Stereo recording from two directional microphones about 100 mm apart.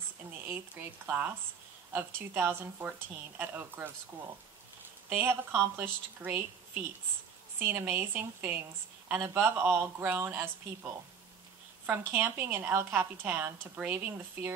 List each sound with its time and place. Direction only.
0.5 s speech: 20° right (ahead or behind)
5.1 s speech: 20° right (ahead or behind)